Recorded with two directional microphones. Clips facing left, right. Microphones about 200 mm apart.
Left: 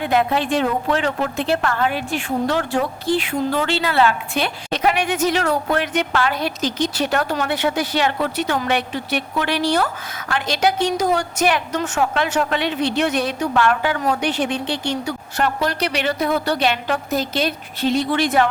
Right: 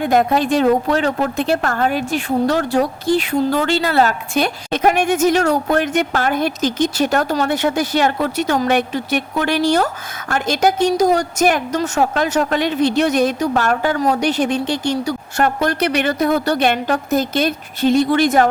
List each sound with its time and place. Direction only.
0.0 s a woman's voice: 45° right (ahead or behind)